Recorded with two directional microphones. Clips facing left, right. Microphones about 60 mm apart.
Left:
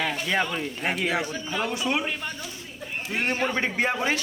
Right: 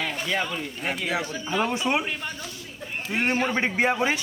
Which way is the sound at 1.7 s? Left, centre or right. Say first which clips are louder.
Right 2 dB; right.